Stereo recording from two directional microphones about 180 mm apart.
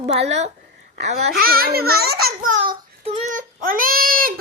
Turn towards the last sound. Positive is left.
turn(degrees=-55)  # may be behind; listen again after turning